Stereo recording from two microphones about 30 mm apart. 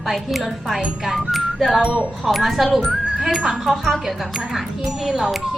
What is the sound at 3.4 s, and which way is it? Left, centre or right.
Speech, centre.